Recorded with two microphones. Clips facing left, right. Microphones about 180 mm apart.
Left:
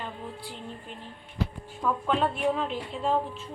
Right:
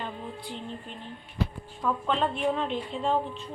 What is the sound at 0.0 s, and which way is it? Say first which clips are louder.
Music: right 1 dB; 5° left (ahead or behind).